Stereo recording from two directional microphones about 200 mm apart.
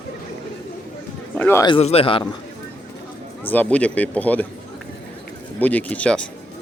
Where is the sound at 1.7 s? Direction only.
30° left (ahead or behind).